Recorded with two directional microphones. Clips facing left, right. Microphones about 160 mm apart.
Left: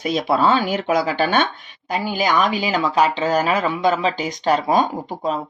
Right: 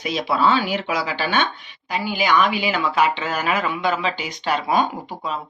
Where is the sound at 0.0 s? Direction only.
45° left (ahead or behind).